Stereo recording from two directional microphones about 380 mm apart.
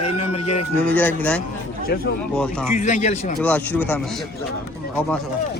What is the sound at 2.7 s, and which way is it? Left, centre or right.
Speech, centre.